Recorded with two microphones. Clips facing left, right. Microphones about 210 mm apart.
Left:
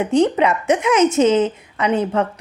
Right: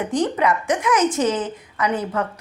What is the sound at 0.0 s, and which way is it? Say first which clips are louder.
A woman's voice: left 5 dB; 25° left (ahead or behind).